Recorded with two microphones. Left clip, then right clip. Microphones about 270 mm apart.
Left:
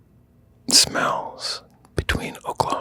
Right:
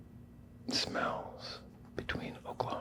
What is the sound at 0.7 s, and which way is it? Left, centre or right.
Speech, left.